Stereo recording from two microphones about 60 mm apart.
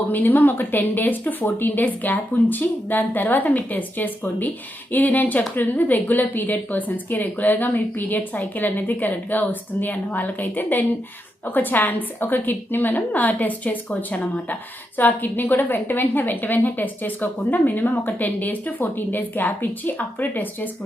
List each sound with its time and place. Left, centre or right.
0.1 s a woman's voice: left